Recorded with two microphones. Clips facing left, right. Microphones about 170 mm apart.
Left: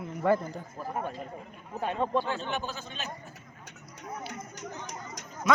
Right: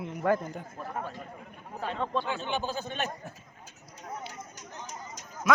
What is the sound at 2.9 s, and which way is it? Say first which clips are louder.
Speech: right 5 dB; 55° right (ahead or behind).